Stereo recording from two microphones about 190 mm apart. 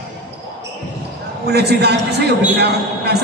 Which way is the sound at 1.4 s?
60° right (ahead or behind).